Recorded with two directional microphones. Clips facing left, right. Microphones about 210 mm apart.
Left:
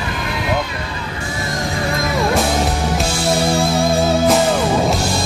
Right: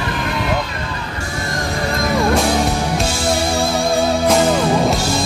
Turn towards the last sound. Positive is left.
turn(degrees=0)  # may be behind; listen again after turning